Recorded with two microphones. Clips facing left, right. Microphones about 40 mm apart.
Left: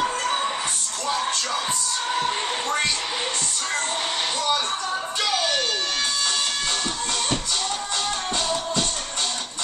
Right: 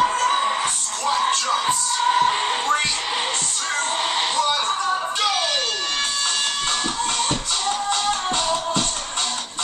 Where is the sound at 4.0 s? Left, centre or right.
Right.